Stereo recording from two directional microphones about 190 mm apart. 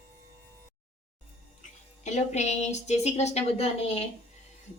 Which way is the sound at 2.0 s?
35° left (ahead or behind).